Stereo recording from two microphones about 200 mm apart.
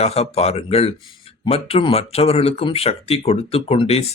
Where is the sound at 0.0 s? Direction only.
30° left (ahead or behind).